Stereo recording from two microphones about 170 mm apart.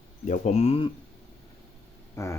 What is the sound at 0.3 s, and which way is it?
Speech, 40° left (ahead or behind).